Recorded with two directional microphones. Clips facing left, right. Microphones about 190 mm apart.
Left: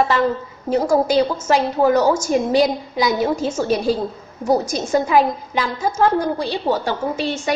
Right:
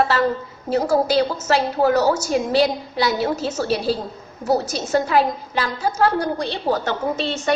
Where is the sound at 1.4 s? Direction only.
10° left (ahead or behind).